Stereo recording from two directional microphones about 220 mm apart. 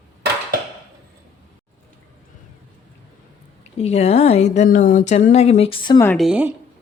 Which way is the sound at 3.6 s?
30° left (ahead or behind).